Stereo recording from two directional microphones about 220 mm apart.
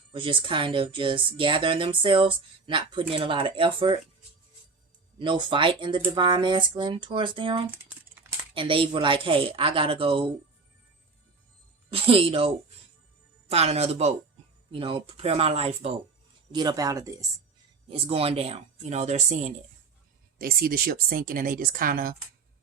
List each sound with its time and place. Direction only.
0.1 s speech: 20° right (ahead or behind)
5.2 s speech: 20° right (ahead or behind)
11.9 s speech: 25° right (ahead or behind)
13.5 s speech: 30° right (ahead or behind)
20.4 s speech: 40° right (ahead or behind)